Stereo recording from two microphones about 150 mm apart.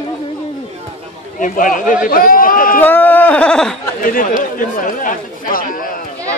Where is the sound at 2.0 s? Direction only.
70° left (ahead or behind).